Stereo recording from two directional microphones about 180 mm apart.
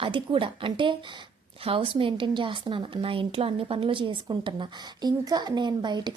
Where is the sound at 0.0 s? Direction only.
30° right (ahead or behind).